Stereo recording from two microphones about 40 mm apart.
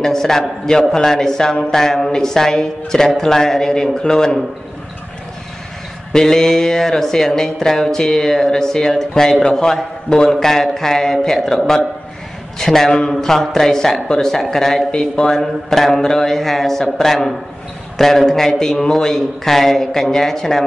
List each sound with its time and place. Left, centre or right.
0.0 s a woman's voice: centre
6.1 s a woman's voice: centre
14.9 s speech: centre
15.3 s a woman's voice: centre